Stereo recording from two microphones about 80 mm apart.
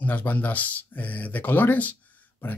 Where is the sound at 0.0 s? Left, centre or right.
Left.